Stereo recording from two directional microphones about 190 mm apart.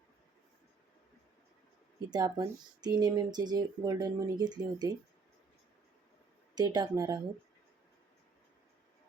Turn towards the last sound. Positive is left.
turn(degrees=-20)  # may be behind; listen again after turning